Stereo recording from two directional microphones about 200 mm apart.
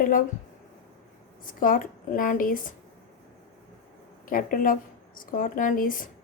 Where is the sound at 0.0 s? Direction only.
45° left (ahead or behind).